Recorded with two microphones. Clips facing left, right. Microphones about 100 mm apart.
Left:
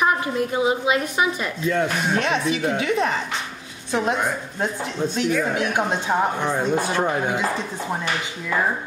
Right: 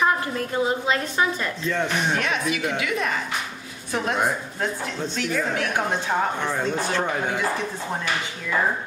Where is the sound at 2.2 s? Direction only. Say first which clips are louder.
Left 3 dB; 30° left (ahead or behind).